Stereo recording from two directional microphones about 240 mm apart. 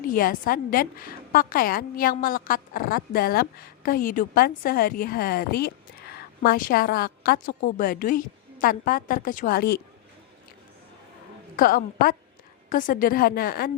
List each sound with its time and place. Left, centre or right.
0.0 s a woman's voice: left
11.5 s a woman's voice: left